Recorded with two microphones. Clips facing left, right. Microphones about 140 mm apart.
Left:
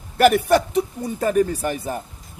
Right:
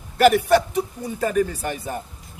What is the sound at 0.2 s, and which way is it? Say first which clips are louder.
Speech: even; 50° left (ahead or behind).